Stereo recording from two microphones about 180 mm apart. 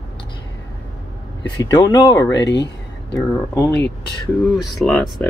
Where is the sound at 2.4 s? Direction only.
75° left (ahead or behind).